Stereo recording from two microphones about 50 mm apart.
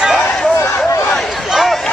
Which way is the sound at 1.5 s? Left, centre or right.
Centre.